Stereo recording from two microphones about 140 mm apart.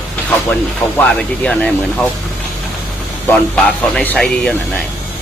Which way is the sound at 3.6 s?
10° left (ahead or behind).